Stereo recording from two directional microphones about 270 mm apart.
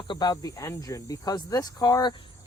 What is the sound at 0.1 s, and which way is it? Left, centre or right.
Speech, centre.